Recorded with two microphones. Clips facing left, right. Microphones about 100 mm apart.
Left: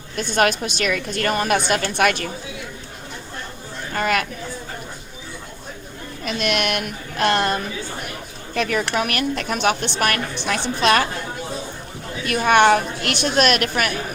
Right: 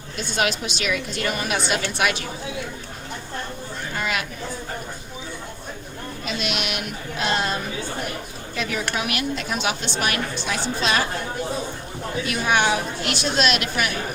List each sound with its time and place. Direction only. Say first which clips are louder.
0.2 s a woman's voice: left 5 dB; 50° left (ahead or behind)
3.9 s a woman's voice: left 6 dB; 50° left (ahead or behind)
6.2 s a woman's voice: left 6 dB; 55° left (ahead or behind)
12.2 s a woman's voice: left 6 dB; 55° left (ahead or behind)